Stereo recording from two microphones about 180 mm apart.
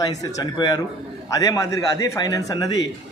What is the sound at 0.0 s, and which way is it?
Speech, 20° left (ahead or behind).